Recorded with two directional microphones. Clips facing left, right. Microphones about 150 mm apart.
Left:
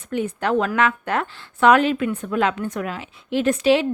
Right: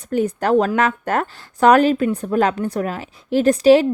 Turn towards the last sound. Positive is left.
turn(degrees=-40)  # may be behind; listen again after turning